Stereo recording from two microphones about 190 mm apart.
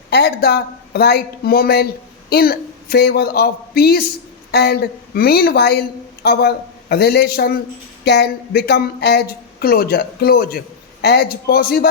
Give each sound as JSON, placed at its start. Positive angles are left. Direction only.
{"t": 0.1, "sound": "speech", "side_deg": 55}